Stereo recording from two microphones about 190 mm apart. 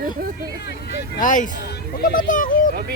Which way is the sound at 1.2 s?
45° left (ahead or behind).